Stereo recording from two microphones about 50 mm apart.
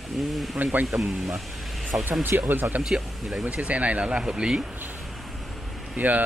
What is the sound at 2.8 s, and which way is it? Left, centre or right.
Speech, centre.